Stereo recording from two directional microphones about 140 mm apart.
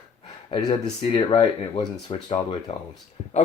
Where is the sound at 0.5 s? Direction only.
40° left (ahead or behind).